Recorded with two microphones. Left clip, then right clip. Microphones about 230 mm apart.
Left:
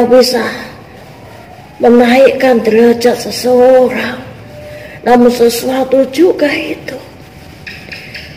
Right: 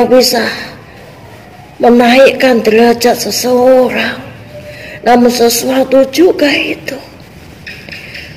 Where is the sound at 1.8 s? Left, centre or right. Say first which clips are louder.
Right 1 dB; right.